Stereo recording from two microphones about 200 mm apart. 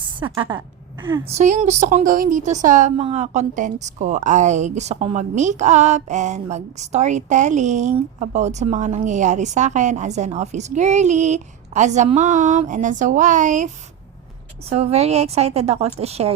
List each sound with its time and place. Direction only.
0.2 s a woman's voice: 25° right (ahead or behind)
1.4 s a woman's voice: 35° right (ahead or behind)
14.7 s a woman's voice: 30° right (ahead or behind)